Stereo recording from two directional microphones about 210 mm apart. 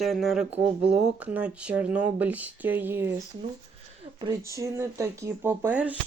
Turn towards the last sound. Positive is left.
turn(degrees=-10)  # may be behind; listen again after turning